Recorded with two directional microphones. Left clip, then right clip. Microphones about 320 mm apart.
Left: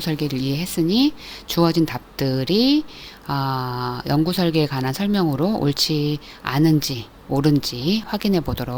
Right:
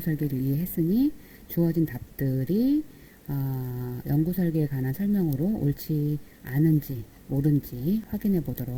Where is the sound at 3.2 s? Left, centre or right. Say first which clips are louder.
Left 13 dB; left.